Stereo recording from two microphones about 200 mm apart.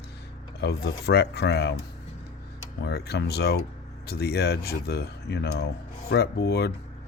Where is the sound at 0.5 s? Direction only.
55° left (ahead or behind).